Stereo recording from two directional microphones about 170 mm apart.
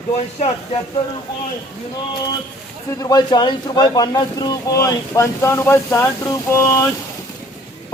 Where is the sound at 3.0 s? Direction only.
25° left (ahead or behind).